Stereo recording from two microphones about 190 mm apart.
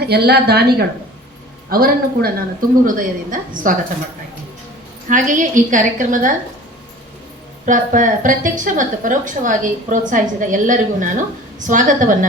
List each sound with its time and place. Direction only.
0.0 s a woman's voice: 60° right (ahead or behind)
5.0 s a woman's voice: 45° right (ahead or behind)
7.6 s a woman's voice: 45° right (ahead or behind)